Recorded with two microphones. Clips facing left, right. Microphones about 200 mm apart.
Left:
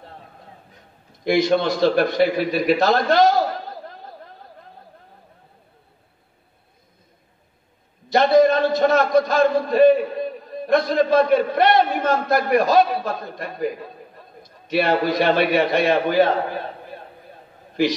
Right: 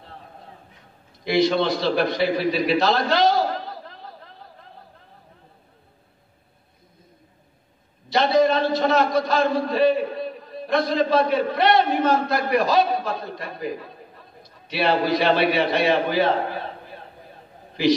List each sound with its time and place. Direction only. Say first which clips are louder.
1.2 s a man's voice: left 2 dB; 50° left (ahead or behind)
8.1 s a man's voice: left 4 dB; 50° left (ahead or behind)